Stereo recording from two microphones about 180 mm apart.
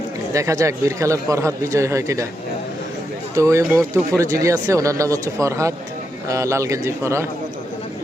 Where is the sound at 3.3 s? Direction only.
15° right (ahead or behind).